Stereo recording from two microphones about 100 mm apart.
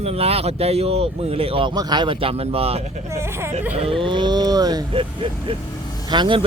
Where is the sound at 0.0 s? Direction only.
90° right; by 1.7 s 70° right (ahead or behind).